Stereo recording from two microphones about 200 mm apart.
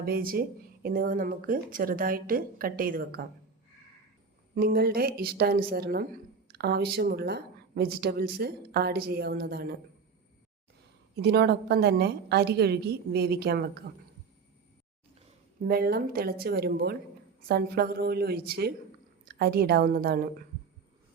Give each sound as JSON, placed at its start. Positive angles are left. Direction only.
{"t": 0.0, "sound": "speech", "side_deg": -45}
{"t": 4.5, "sound": "speech", "side_deg": -50}
{"t": 11.2, "sound": "speech", "side_deg": -55}
{"t": 15.6, "sound": "a woman's voice", "side_deg": -50}